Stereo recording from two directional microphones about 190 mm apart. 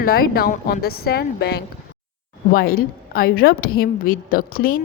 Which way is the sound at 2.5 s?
50° left (ahead or behind).